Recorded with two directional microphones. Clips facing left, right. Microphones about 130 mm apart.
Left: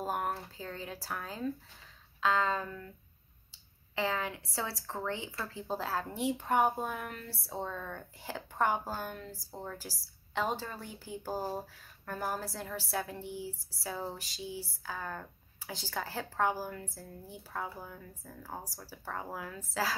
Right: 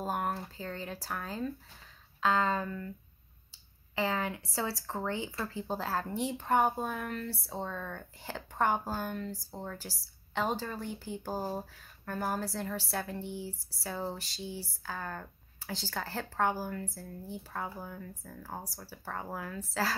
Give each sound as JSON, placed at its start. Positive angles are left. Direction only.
{"t": 0.0, "sound": "speech", "side_deg": 0}
{"t": 3.9, "sound": "speech", "side_deg": 0}